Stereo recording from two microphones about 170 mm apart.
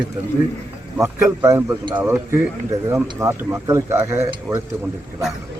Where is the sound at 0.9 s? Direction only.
15° right (ahead or behind).